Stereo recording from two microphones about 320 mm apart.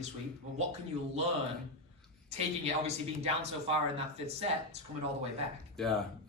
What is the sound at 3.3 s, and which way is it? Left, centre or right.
Speech, centre.